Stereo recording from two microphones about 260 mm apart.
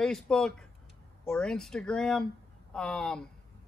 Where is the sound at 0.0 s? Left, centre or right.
Centre.